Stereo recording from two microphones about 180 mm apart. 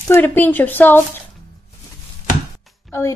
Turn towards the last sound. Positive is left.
turn(degrees=15)  # may be behind; listen again after turning